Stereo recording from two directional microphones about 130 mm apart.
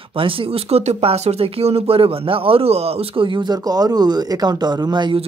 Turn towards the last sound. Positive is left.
turn(degrees=-35)  # may be behind; listen again after turning